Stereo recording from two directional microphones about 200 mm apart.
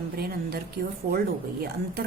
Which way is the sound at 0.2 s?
50° right (ahead or behind).